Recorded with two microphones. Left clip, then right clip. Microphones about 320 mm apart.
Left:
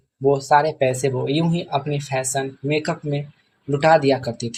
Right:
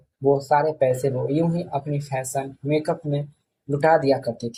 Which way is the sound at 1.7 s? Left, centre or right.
Left.